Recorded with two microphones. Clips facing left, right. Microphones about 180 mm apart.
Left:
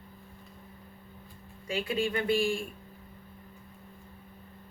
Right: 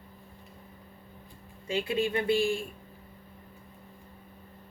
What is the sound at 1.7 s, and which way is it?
Speech, 25° right (ahead or behind).